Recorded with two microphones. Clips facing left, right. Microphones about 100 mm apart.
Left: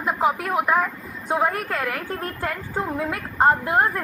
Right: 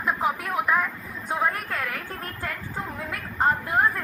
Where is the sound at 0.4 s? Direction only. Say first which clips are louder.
Left 3 dB; 55° left (ahead or behind).